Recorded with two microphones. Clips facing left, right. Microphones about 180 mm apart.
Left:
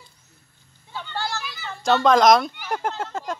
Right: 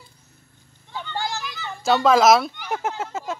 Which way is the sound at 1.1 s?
15° right (ahead or behind).